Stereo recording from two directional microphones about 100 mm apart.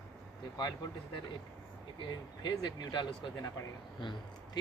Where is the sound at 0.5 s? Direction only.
45° left (ahead or behind).